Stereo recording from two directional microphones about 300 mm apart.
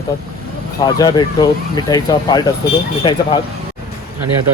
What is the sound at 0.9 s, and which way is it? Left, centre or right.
Speech, centre.